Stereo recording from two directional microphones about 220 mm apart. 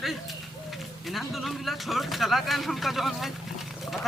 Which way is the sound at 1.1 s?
Centre (ahead or behind).